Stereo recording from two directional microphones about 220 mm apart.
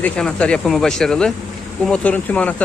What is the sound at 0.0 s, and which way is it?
Speech, 5° left (ahead or behind).